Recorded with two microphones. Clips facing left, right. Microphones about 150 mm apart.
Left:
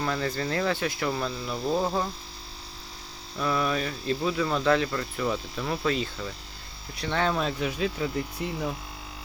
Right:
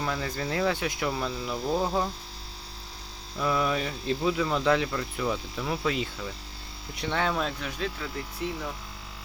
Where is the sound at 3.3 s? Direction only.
15° right (ahead or behind).